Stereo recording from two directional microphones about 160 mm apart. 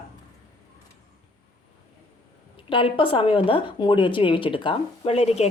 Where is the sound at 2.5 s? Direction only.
30° left (ahead or behind).